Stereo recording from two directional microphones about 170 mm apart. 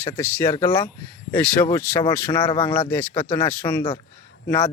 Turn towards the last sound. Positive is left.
turn(degrees=10)  # may be behind; listen again after turning